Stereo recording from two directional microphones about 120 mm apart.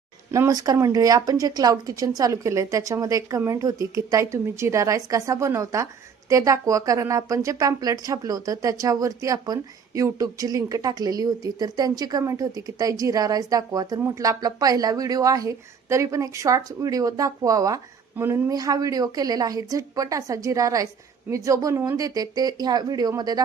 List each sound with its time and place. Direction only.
0.3 s a woman's voice: 30° right (ahead or behind)